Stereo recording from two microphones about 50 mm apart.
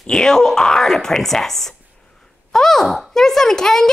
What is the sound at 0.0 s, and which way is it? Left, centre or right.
Speech, centre.